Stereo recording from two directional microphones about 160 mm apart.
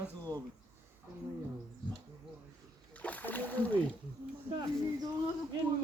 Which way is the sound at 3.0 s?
10° left (ahead or behind).